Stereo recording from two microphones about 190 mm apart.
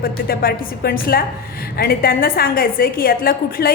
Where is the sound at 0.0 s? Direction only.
50° left (ahead or behind).